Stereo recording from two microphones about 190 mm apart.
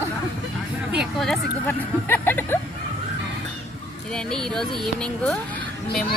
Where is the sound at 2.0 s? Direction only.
10° left (ahead or behind).